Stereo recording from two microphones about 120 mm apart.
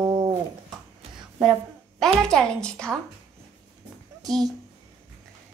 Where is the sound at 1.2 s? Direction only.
5° right (ahead or behind).